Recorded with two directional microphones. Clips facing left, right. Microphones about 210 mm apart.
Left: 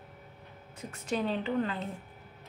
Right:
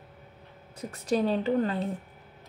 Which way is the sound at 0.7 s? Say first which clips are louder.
Right 6 dB; 35° right (ahead or behind).